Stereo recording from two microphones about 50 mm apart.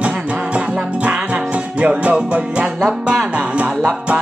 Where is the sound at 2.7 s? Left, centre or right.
Centre.